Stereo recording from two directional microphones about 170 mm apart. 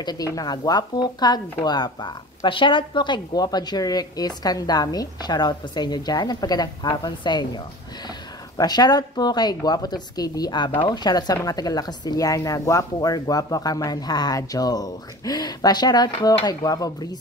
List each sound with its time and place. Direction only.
0.0 s a woman's voice: 25° left (ahead or behind)